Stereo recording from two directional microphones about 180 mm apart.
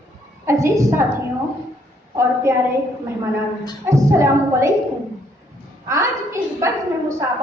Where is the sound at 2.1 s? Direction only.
15° right (ahead or behind).